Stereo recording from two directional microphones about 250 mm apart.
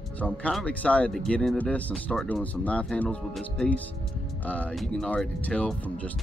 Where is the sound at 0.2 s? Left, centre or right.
Centre.